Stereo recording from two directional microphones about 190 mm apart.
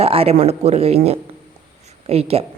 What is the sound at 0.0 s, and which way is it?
Speech, 30° right (ahead or behind).